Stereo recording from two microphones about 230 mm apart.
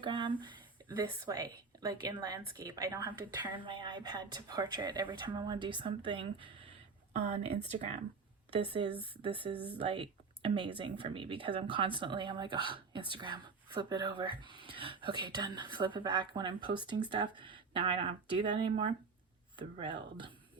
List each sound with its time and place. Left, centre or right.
0.0 s speech: right